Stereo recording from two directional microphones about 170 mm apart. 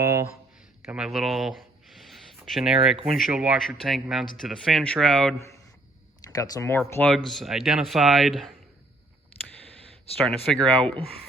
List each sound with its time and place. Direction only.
0.0 s a sound: 20° right (ahead or behind)
0.9 s a sound: 5° right (ahead or behind)
3.2 s speech: 5° right (ahead or behind)
6.3 s speech: 20° left (ahead or behind)
7.3 s speech: centre (ahead or behind)
10.2 s speech: 5° left (ahead or behind)